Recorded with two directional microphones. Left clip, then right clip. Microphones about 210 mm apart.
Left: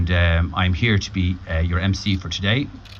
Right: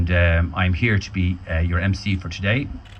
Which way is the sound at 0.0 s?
50° right (ahead or behind).